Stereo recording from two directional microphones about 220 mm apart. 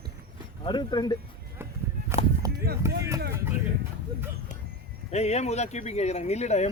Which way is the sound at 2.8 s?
10° right (ahead or behind).